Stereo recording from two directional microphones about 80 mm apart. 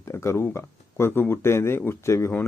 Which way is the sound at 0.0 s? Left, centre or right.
Left.